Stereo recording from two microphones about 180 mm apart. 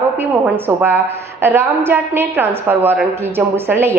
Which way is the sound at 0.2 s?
10° right (ahead or behind).